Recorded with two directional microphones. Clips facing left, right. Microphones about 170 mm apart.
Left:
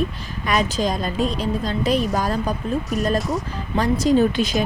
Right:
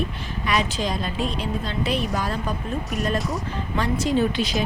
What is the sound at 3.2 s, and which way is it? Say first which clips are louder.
Speech: left 4 dB; centre (ahead or behind).